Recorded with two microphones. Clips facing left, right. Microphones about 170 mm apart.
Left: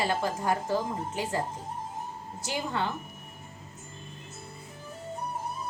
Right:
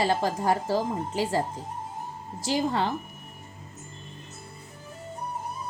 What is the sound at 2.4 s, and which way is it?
Speech, 35° right (ahead or behind).